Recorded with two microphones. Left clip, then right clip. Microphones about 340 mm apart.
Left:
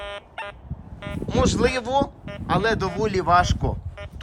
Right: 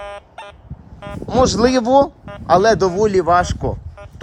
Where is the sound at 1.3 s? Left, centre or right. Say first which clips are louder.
Right 7 dB; centre.